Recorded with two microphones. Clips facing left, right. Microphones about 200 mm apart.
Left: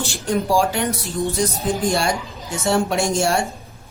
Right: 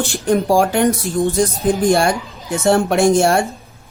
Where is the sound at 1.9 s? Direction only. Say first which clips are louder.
Right 5 dB; 55° right (ahead or behind).